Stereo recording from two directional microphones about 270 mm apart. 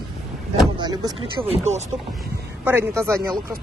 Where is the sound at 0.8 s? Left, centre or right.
Centre.